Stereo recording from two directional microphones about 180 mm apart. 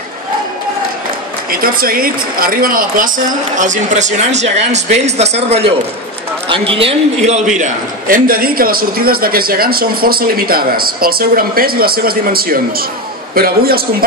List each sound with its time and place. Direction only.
1.5 s a man's voice: 55° right (ahead or behind)